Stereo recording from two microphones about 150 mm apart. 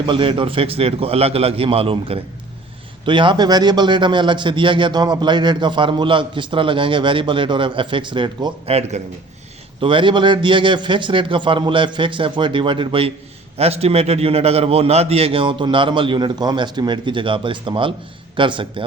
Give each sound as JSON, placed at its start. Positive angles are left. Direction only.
{"t": 0.0, "sound": "a man's voice", "side_deg": -35}
{"t": 9.8, "sound": "a man's voice", "side_deg": -35}